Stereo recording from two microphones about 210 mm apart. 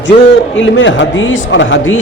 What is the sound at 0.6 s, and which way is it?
Speech, 60° left (ahead or behind).